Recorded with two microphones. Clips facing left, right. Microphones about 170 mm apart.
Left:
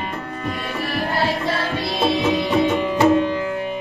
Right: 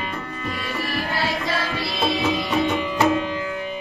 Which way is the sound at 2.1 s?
60° left (ahead or behind).